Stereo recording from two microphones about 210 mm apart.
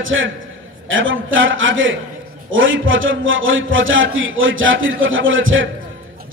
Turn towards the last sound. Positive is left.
turn(degrees=-65)  # may be behind; listen again after turning